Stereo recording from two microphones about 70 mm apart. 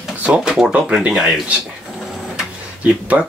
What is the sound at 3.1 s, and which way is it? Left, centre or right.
Speech, right.